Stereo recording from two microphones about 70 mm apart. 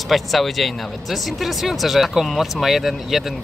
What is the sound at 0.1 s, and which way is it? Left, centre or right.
Speech, centre.